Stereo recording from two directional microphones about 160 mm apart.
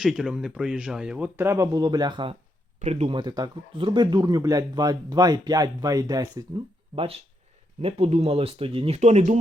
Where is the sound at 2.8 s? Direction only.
40° right (ahead or behind); by 6.4 s 25° right (ahead or behind).